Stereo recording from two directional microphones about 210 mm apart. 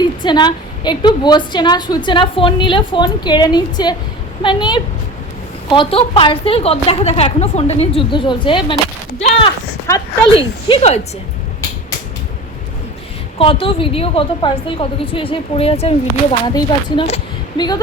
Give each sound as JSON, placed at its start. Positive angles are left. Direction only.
{"t": 0.0, "sound": "a woman's voice", "side_deg": 20}
{"t": 13.4, "sound": "a woman's voice", "side_deg": 25}